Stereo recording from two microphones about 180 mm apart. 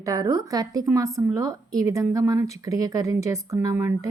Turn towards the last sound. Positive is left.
turn(degrees=-15)  # may be behind; listen again after turning